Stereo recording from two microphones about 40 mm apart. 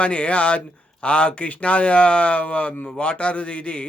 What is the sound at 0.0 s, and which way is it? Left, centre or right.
A man's voice, left.